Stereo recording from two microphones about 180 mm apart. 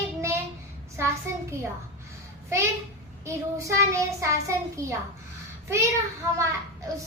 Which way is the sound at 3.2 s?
15° right (ahead or behind).